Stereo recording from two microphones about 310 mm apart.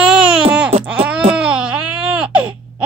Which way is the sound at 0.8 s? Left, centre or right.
Centre.